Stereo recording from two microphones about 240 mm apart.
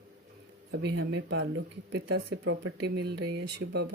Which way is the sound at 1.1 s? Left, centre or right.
Right.